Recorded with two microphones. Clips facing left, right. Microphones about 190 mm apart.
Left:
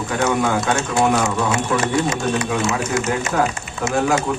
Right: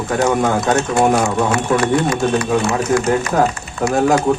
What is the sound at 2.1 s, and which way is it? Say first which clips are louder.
Speech: right 5 dB; 20° left (ahead or behind).